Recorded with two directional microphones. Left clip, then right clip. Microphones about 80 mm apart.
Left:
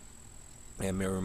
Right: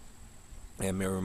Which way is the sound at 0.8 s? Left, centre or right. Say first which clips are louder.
Right 1 dB; right.